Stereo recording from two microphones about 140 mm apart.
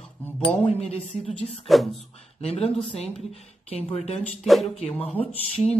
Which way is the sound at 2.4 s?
45° left (ahead or behind).